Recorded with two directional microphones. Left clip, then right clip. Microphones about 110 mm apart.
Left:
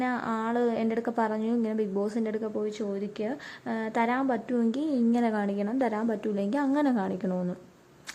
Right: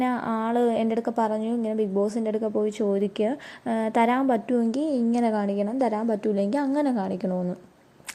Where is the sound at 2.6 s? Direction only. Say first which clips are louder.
Right 7 dB; 35° right (ahead or behind).